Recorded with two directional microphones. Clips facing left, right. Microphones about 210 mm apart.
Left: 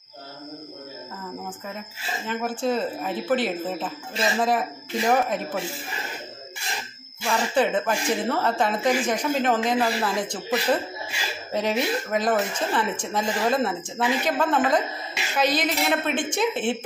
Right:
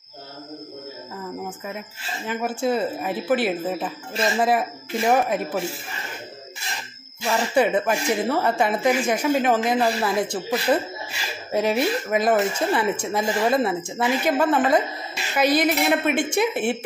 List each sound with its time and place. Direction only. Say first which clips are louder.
2.2 s speech: right 2 dB; 10° right (ahead or behind)
7.5 s speech: right 3 dB; 10° right (ahead or behind)